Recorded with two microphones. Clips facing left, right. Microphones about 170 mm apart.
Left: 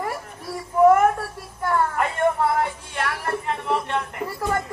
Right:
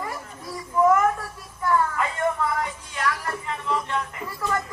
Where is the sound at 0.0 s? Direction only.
60° left (ahead or behind).